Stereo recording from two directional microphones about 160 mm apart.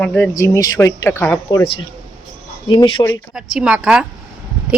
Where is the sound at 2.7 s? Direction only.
30° left (ahead or behind).